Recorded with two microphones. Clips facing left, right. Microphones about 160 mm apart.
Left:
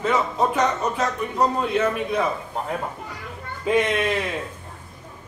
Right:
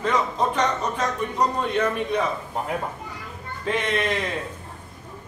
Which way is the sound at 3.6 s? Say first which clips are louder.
Left 4 dB; 10° left (ahead or behind).